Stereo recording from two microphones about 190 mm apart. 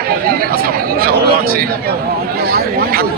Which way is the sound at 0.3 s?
50° right (ahead or behind).